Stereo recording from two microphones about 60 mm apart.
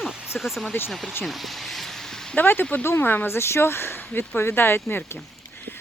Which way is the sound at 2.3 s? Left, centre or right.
Left.